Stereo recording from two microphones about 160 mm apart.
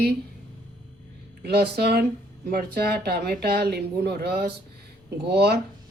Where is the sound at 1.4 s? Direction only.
90° right.